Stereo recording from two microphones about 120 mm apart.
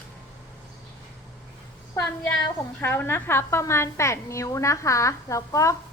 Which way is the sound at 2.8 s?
20° left (ahead or behind).